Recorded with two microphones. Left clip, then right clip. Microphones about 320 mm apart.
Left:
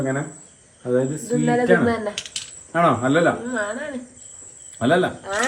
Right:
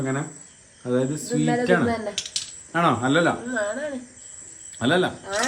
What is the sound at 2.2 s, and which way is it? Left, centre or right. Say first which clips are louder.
Coin: right 1 dB; centre.